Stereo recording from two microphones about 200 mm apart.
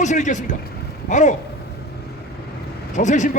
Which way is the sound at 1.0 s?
35° left (ahead or behind).